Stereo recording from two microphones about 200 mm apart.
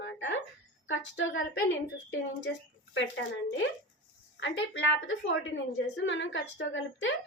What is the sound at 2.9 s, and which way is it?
A woman's voice, 65° left (ahead or behind).